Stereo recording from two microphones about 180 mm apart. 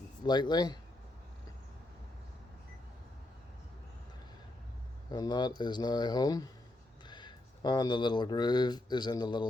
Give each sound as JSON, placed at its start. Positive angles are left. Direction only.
{"t": 0.3, "sound": "speech", "side_deg": 25}
{"t": 5.0, "sound": "speech", "side_deg": 20}